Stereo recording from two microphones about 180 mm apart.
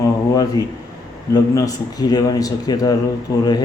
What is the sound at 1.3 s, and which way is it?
Speech, 20° left (ahead or behind).